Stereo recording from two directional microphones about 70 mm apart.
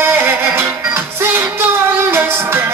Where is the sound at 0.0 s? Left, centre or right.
Right.